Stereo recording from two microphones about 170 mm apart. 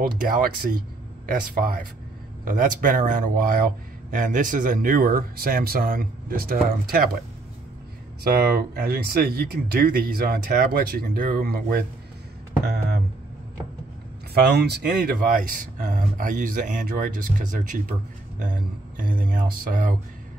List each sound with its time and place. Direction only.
0.0 s speech: 55° right (ahead or behind)
8.2 s speech: 65° right (ahead or behind)
12.6 s a sound: 70° right (ahead or behind)
14.3 s speech: 70° right (ahead or behind); by 20.0 s 50° right (ahead or behind)